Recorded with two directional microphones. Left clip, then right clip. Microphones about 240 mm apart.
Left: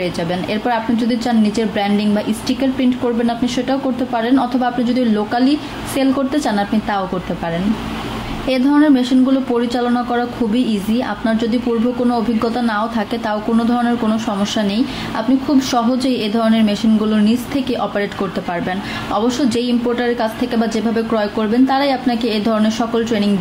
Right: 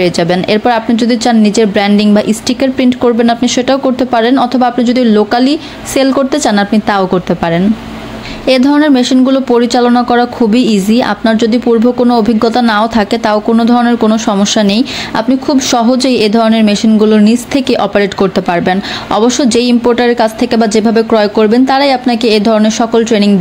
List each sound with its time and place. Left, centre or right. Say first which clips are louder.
0.0 s a woman's voice: right 10 dB; right
8.5 s a woman's voice: right 6 dB; right